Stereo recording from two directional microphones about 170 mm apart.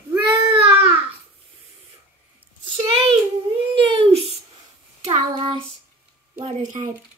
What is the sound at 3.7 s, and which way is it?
A child's voice, 35° right (ahead or behind).